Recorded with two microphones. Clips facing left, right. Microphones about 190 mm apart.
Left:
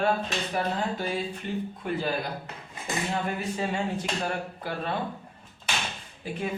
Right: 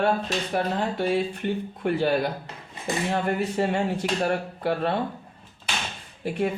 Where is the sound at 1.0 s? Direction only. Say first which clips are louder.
Right 6 dB; 65° right (ahead or behind).